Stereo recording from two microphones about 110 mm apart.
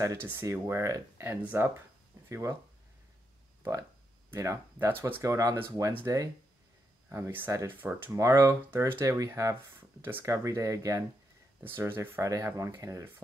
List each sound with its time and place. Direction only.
0.0 s speech: 25° right (ahead or behind)
1.4 s speech: 15° right (ahead or behind)
2.2 s speech: 25° right (ahead or behind)
4.3 s speech: 25° right (ahead or behind)
7.1 s speech: 20° right (ahead or behind)
8.7 s speech: 20° right (ahead or behind)
9.0 s speech: 30° right (ahead or behind)